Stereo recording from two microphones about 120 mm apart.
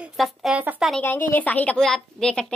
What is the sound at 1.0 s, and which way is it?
A woman's voice, 15° left (ahead or behind).